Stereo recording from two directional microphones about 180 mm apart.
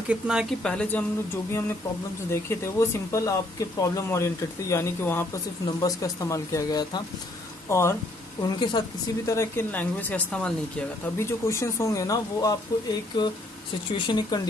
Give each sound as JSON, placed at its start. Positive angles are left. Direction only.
{"t": 0.1, "sound": "speech", "side_deg": -5}
{"t": 2.6, "sound": "speech", "side_deg": 15}
{"t": 8.4, "sound": "speech", "side_deg": 25}